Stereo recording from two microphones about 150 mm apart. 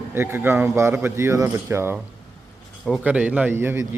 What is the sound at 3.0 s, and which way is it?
Speech, 10° right (ahead or behind).